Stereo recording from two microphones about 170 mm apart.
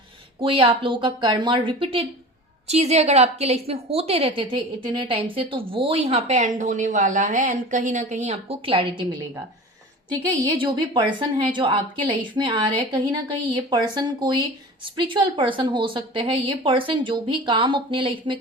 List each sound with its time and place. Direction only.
0.3 s a woman's voice: 30° right (ahead or behind)
10.6 s a woman's voice: 25° right (ahead or behind)